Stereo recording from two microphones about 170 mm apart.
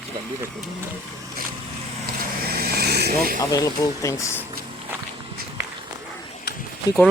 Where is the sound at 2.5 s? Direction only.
65° right (ahead or behind).